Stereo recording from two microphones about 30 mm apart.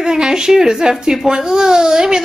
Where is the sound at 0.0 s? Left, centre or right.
Right.